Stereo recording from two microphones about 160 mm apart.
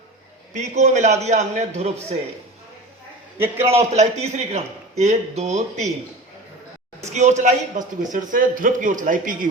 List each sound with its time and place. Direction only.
0.5 s a man's voice: 45° right (ahead or behind)
3.3 s a man's voice: 15° right (ahead or behind)
3.7 s a man's voice: 40° right (ahead or behind)
7.1 s a man's voice: 45° right (ahead or behind)